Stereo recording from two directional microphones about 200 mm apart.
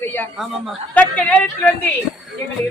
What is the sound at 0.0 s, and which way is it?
Speech, 10° left (ahead or behind).